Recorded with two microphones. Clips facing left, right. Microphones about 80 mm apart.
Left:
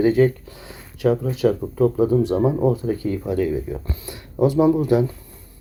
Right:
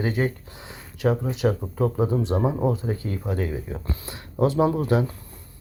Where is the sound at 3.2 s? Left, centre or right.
Right.